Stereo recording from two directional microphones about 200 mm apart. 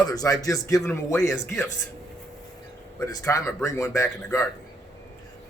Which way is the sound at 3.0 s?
15° left (ahead or behind).